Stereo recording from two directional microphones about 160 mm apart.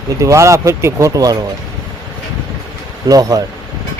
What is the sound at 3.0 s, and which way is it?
Speech, 20° right (ahead or behind).